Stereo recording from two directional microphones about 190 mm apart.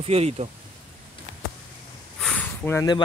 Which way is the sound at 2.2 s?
5° left (ahead or behind).